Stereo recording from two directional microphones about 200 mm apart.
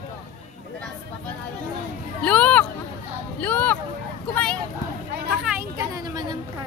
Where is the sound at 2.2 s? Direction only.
5° left (ahead or behind).